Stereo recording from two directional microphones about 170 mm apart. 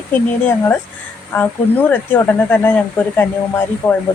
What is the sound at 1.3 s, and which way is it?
Speech, 10° left (ahead or behind).